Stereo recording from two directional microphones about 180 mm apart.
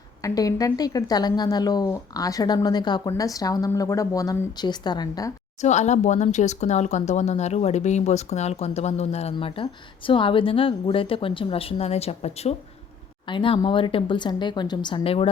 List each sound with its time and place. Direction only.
0.2 s a woman's voice: 20° left (ahead or behind)
5.6 s a woman's voice: 40° left (ahead or behind)